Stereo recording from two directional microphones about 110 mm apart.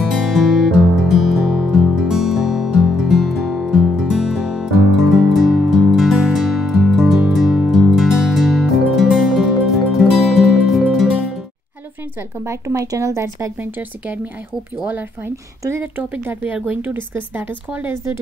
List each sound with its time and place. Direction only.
0.1 s music: 5° right (ahead or behind)
12.4 s speech: 25° right (ahead or behind)
17.9 s speech: 25° right (ahead or behind)